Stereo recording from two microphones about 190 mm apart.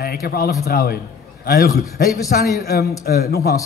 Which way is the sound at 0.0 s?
55° left (ahead or behind).